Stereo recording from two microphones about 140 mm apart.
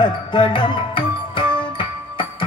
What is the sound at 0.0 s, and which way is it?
Music, 35° left (ahead or behind).